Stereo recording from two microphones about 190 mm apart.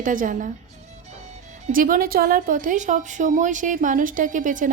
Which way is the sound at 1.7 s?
45° right (ahead or behind).